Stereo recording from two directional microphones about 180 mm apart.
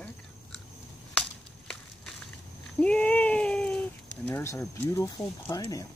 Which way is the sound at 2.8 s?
5° left (ahead or behind).